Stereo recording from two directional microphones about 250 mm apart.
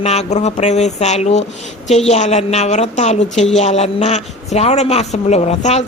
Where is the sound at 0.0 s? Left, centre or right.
Left.